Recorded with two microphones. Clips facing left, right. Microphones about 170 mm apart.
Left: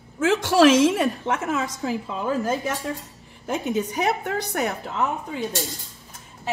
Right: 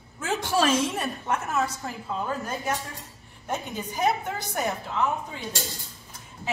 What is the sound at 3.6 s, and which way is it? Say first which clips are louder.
A woman's voice: left 3 dB; 80° left.